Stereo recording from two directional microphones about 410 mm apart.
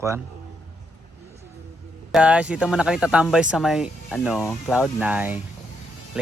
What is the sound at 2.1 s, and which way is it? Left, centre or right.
Speech, centre.